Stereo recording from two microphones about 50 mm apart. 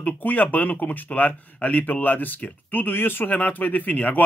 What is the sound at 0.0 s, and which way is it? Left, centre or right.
Speech, left.